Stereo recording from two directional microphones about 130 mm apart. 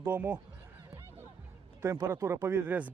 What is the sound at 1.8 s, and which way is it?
Speech, 20° right (ahead or behind).